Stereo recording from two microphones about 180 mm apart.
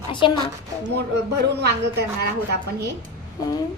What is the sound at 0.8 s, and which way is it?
Speech, 65° right (ahead or behind).